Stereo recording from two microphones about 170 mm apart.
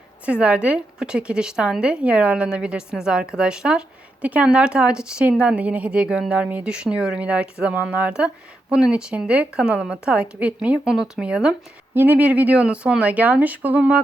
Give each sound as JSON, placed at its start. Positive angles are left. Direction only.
{"t": 0.3, "sound": "a woman's voice", "side_deg": -5}